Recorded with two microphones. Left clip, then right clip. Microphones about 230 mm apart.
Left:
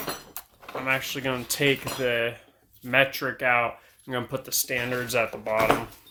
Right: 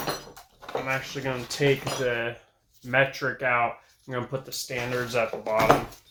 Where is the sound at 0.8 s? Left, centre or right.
Left.